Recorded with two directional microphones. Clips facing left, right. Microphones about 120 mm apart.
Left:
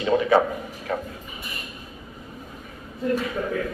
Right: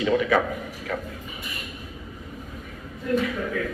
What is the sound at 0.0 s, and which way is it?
A man's voice, 35° left (ahead or behind).